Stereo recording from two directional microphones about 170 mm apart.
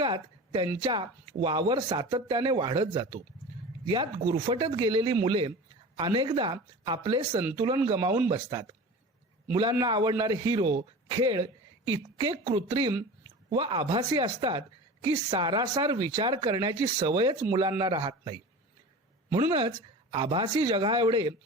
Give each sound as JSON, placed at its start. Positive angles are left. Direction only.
{"t": 0.0, "sound": "a sound", "side_deg": -25}
{"t": 0.8, "sound": "speech", "side_deg": -25}
{"t": 7.9, "sound": "speech", "side_deg": -15}
{"t": 8.3, "sound": "speech", "side_deg": -25}
{"t": 9.8, "sound": "speech", "side_deg": -25}
{"t": 19.4, "sound": "speech", "side_deg": -25}